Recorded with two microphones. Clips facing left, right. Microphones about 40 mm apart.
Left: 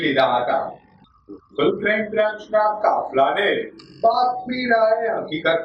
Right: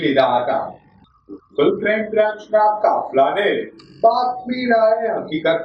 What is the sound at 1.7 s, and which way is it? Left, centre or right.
A woman's voice, centre.